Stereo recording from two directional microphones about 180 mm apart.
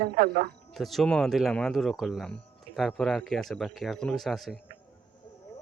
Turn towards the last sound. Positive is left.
turn(degrees=0)  # may be behind; listen again after turning